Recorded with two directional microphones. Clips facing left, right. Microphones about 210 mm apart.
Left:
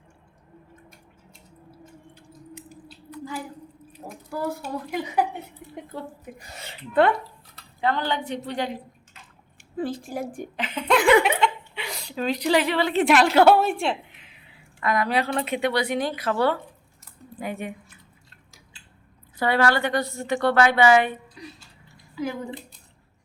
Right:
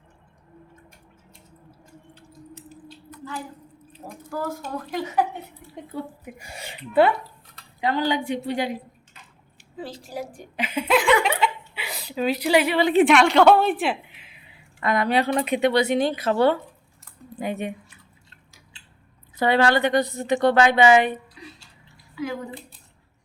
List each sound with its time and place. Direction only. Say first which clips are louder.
2.1 s a sound: right 1 dB; 15° left (ahead or behind)
4.3 s speech: left 1 dB; 10° left (ahead or behind)
6.2 s a woman's voice: right 2 dB; 10° right (ahead or behind)
9.7 s a woman's voice: left 4 dB; 50° left (ahead or behind)
10.6 s speech: right 1 dB; 10° right (ahead or behind)
11.2 s chuckle: left 1 dB; 5° right (ahead or behind)
13.1 s a woman's voice: left 3 dB; centre (ahead or behind)
14.8 s a woman's voice: right 2 dB; 25° right (ahead or behind)
19.4 s a woman's voice: right 2 dB; 20° right (ahead or behind)